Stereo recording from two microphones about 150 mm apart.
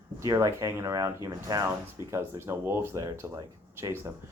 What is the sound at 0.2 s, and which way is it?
Speech, 20° right (ahead or behind).